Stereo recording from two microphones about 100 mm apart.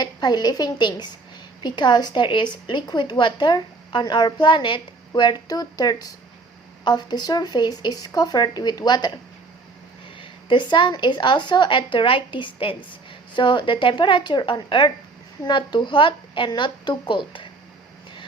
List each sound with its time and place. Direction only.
0.0 s a woman's voice: 45° left (ahead or behind)
10.2 s a woman's voice: 50° left (ahead or behind)